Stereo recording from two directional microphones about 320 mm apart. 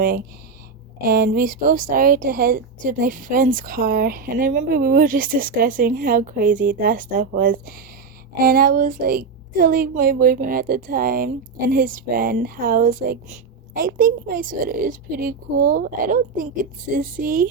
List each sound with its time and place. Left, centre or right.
0.0 s speech: right